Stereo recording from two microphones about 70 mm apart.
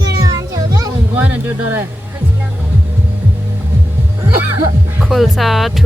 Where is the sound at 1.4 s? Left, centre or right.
Right.